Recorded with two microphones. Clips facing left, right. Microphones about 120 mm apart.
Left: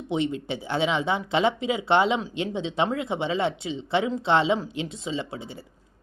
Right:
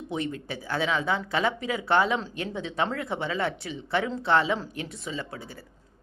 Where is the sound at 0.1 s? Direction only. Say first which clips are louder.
Left 5 dB; 20° left (ahead or behind).